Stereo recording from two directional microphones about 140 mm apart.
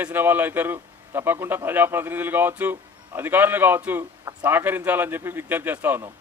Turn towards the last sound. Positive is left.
turn(degrees=-15)  # may be behind; listen again after turning